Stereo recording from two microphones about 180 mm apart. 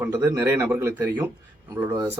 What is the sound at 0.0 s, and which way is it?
Speech, 10° right (ahead or behind).